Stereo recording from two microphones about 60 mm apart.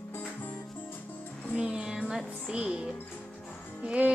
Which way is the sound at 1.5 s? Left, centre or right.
Centre.